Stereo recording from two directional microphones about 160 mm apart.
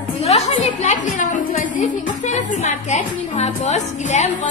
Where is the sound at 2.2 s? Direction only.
45° left (ahead or behind).